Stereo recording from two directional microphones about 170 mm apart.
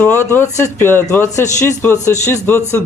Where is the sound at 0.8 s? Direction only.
15° left (ahead or behind).